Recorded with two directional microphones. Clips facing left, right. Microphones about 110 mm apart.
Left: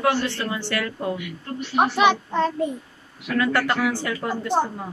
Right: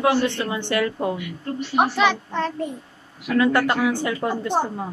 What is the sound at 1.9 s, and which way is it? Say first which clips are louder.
Speech: left 2 dB; 15° left (ahead or behind).